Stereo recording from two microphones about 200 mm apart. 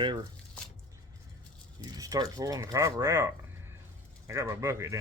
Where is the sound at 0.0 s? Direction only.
20° right (ahead or behind).